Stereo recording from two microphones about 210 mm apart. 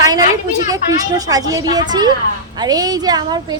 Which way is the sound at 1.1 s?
15° right (ahead or behind).